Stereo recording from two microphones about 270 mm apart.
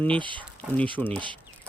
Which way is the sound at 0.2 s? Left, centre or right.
Centre.